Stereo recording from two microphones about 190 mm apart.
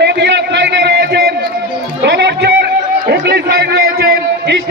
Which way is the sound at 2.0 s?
60° right (ahead or behind).